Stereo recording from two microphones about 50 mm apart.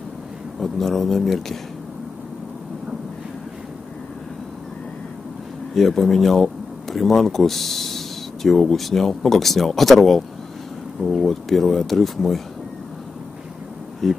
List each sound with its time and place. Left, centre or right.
0.6 s speech: centre
5.8 s speech: centre
11.0 s speech: centre
11.2 s speech: centre
14.0 s speech: centre